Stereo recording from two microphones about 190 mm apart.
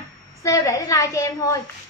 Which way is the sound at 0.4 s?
15° left (ahead or behind).